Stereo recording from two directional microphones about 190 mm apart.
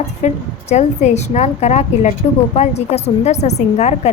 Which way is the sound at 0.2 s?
35° left (ahead or behind).